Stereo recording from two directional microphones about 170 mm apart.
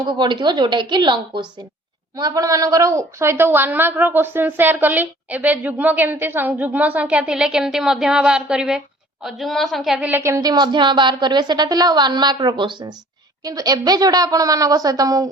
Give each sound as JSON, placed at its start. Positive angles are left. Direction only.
{"t": 0.0, "sound": "a woman's voice", "side_deg": -25}